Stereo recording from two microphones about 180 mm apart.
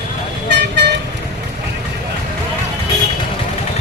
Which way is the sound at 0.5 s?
65° right (ahead or behind).